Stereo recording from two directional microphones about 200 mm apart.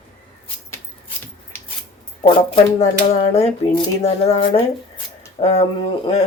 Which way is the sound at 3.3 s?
30° left (ahead or behind).